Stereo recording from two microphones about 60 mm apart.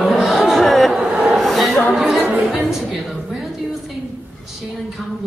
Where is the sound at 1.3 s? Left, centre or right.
Centre.